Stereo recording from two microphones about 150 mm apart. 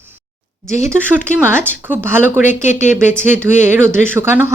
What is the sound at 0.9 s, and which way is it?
Speech, 15° right (ahead or behind).